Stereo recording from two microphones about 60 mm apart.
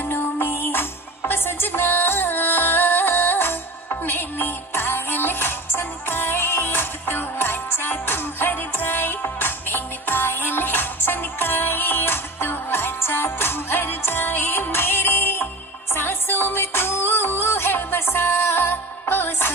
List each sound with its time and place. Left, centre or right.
0.0 s music: left